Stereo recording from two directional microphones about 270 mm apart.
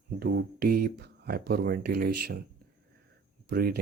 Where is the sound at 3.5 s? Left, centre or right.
Right.